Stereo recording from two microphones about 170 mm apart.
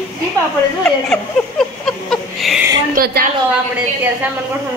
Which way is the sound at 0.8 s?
5° left (ahead or behind).